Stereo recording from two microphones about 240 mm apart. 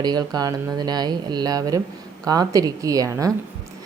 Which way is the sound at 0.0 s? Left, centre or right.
Centre.